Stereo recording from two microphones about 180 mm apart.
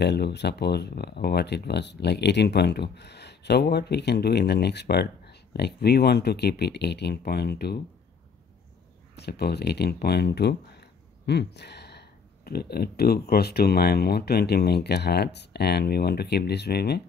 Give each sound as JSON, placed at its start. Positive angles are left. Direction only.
{"t": 0.0, "sound": "speech", "side_deg": 70}
{"t": 9.1, "sound": "speech", "side_deg": 65}